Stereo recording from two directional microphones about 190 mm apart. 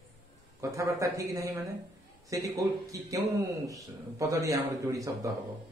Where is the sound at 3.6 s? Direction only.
15° right (ahead or behind).